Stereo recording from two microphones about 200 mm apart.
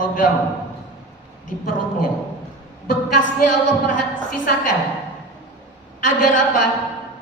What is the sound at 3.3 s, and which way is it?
Speech, 40° left (ahead or behind).